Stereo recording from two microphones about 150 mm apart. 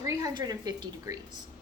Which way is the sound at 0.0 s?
20° right (ahead or behind).